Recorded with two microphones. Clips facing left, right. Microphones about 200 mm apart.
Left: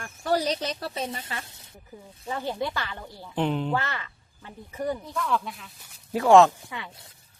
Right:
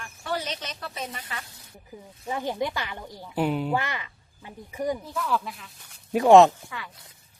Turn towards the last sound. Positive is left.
turn(degrees=25)  # may be behind; listen again after turning